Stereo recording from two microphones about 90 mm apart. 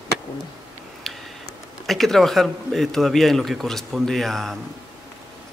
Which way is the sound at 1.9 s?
5° left (ahead or behind).